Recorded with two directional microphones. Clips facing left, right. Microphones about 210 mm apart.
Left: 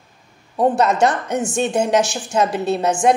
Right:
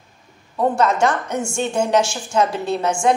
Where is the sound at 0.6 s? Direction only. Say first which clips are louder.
Left 2 dB; 20° left (ahead or behind).